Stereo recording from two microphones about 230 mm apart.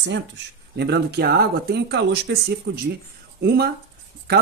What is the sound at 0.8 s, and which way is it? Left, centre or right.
Speech, right.